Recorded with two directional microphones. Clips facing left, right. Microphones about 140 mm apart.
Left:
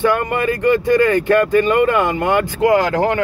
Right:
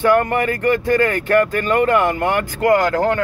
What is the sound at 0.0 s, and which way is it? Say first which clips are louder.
Speech: right 1 dB; 15° left (ahead or behind).